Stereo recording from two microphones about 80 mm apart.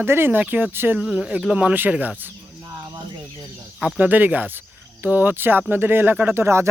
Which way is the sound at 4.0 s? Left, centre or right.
Right.